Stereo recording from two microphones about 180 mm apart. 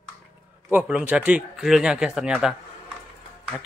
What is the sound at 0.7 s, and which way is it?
Speech, 10° right (ahead or behind).